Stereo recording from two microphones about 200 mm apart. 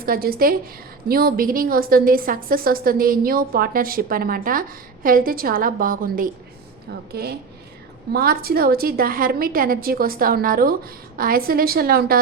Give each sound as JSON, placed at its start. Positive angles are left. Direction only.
{"t": 0.0, "sound": "a woman's voice", "side_deg": -45}